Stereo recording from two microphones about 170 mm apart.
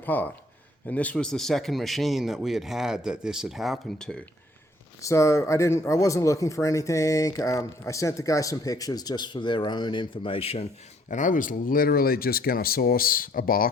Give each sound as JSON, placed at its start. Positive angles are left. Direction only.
{"t": 0.0, "sound": "speech", "side_deg": 10}
{"t": 4.9, "sound": "speech", "side_deg": 20}
{"t": 11.1, "sound": "speech", "side_deg": 50}